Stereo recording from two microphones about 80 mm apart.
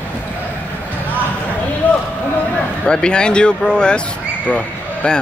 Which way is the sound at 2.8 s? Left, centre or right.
Centre.